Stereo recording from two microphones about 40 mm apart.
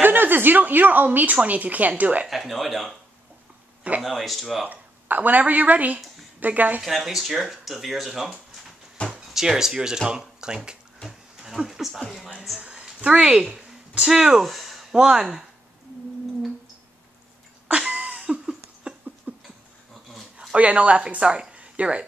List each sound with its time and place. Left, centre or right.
0.0 s a woman's voice: right
2.2 s speech: centre
4.0 s speech: centre
4.6 s a woman's voice: right
6.8 s speech: centre; by 10.8 s right
11.1 s speech: centre
13.0 s speech: right
13.4 s speech: centre
14.4 s a sound: centre
17.6 s cough: right
18.9 s a sound: right
20.5 s speech: right